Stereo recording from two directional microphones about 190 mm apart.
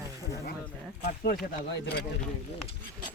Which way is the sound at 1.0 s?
50° left (ahead or behind).